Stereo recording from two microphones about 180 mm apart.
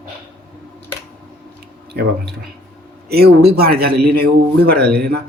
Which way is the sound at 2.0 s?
65° right (ahead or behind).